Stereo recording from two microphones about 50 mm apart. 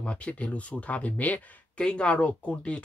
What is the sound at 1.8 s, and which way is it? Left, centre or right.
Speech, centre.